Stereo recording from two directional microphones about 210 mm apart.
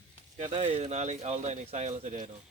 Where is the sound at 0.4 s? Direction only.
25° right (ahead or behind).